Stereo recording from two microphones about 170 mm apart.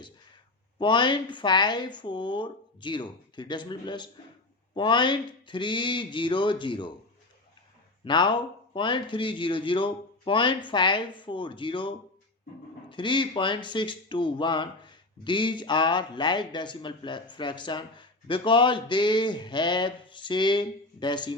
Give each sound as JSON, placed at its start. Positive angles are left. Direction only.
{"t": 0.8, "sound": "speech", "side_deg": 30}
{"t": 8.0, "sound": "speech", "side_deg": 25}